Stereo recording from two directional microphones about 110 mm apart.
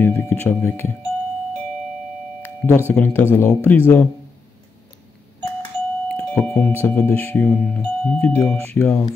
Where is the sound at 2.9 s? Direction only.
15° left (ahead or behind).